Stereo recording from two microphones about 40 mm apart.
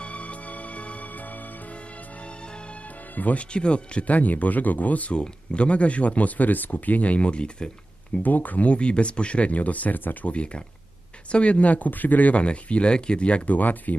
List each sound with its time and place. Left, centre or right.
0.0 s music: left
3.2 s speech: left
3.5 s speech: left
5.1 s speech: left
8.2 s speech: left
10.2 s speech: left
13.5 s speech: left